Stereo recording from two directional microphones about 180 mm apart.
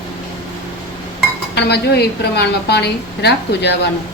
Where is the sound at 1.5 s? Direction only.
65° left (ahead or behind).